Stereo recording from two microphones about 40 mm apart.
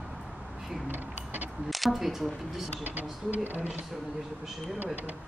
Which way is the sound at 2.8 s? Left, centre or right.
Right.